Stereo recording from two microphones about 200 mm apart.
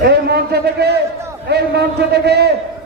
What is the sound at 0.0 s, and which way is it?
A man's voice, 55° right (ahead or behind).